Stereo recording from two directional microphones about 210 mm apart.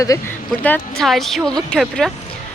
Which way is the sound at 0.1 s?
15° left (ahead or behind).